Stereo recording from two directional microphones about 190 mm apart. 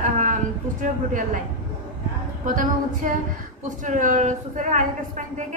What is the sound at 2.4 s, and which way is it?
A woman's voice, 45° right (ahead or behind).